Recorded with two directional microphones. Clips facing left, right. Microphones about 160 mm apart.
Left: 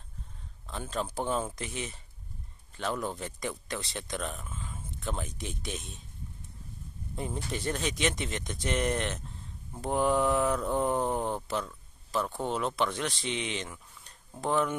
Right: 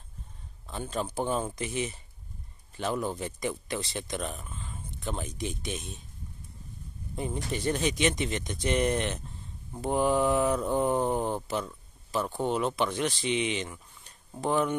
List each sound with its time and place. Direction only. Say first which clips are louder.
0.7 s mantra: right 1 dB; centre (ahead or behind)
7.5 s mantra: right 5 dB; centre (ahead or behind)